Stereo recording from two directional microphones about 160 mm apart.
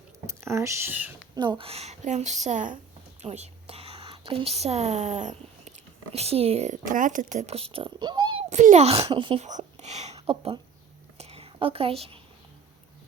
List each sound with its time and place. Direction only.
0.3 s speech: 20° right (ahead or behind)
1.4 s a woman's voice: 30° right (ahead or behind)
8.4 s a child's voice: 45° right (ahead or behind)
9.5 s whispering: 50° right (ahead or behind)